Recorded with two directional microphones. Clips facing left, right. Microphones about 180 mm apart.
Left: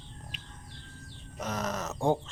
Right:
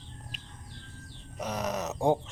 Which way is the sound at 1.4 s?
15° right (ahead or behind).